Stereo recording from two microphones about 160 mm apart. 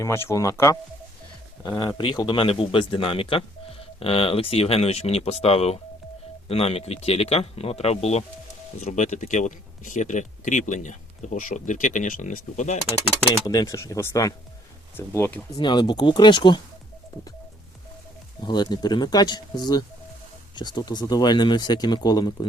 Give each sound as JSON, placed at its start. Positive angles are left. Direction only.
{"t": 0.0, "sound": "speech", "side_deg": 15}
{"t": 2.0, "sound": "speech", "side_deg": 30}
{"t": 13.4, "sound": "speech", "side_deg": 25}
{"t": 15.6, "sound": "speech", "side_deg": 30}
{"t": 18.4, "sound": "speech", "side_deg": 25}